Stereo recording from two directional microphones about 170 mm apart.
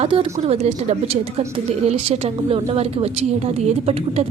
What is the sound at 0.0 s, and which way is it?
A woman's voice, 30° right (ahead or behind).